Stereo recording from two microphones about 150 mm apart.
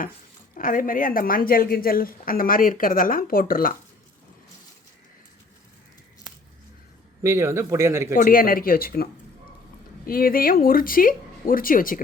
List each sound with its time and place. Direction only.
0.5 s a woman's voice: 65° left (ahead or behind)
7.2 s speech: 20° right (ahead or behind)
8.1 s a woman's voice: 70° left (ahead or behind)
10.1 s a woman's voice: 75° left (ahead or behind)